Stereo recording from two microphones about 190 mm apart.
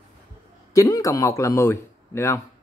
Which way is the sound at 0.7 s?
15° left (ahead or behind).